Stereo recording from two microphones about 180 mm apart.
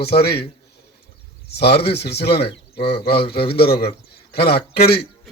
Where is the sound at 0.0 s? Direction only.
65° left (ahead or behind).